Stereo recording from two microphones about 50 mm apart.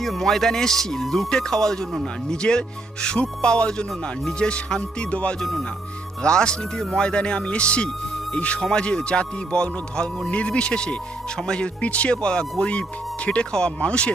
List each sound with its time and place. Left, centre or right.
0.0 s speech: centre; by 5.4 s left
5.4 s speech: centre
6.2 s speech: centre